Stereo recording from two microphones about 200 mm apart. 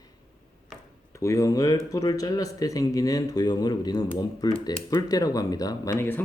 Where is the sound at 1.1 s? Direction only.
15° left (ahead or behind).